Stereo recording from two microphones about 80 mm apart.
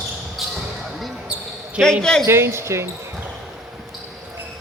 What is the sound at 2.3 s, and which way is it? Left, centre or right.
Speech, right.